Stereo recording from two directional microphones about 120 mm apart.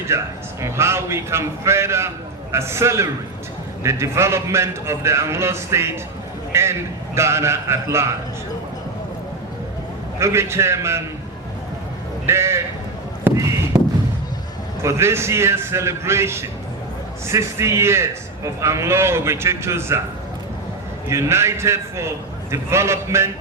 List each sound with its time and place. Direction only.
0.1 s a man's voice: 20° right (ahead or behind)
10.2 s a man's voice: 20° right (ahead or behind)
12.2 s speech: 20° right (ahead or behind)
13.2 s a sound: 25° right (ahead or behind)
14.8 s a man's voice: 20° right (ahead or behind)
21.1 s a man's voice: 20° right (ahead or behind)